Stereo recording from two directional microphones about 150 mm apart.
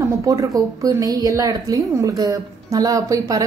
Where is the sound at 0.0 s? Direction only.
20° right (ahead or behind).